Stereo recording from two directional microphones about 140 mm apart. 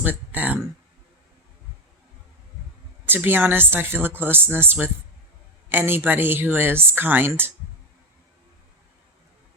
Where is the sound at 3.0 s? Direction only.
15° right (ahead or behind).